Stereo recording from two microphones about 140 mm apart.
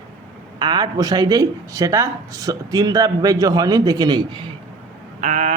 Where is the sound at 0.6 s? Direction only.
30° right (ahead or behind).